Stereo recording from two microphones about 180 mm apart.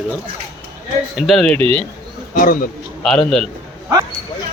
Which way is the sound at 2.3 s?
55° left (ahead or behind).